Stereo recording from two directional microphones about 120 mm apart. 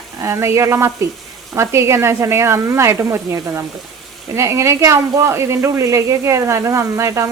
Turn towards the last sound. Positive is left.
turn(degrees=-25)  # may be behind; listen again after turning